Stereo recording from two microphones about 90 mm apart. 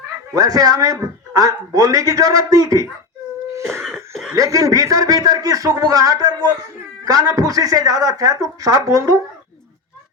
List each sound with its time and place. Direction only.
0.3 s a man's voice: 45° right (ahead or behind)
3.5 s cough: 30° right (ahead or behind)
4.4 s a man's voice: 40° right (ahead or behind)